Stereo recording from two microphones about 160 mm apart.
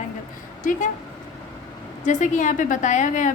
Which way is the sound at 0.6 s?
55° left (ahead or behind).